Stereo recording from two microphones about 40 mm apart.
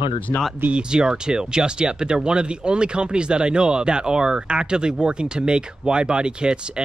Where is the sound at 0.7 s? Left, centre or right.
Centre.